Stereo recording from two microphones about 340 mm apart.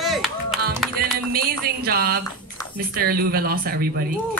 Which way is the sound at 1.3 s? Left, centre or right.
Right.